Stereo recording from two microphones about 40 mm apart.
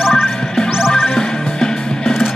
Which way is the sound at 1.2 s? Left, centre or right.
Centre.